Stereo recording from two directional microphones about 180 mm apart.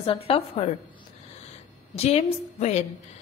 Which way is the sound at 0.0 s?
30° left (ahead or behind).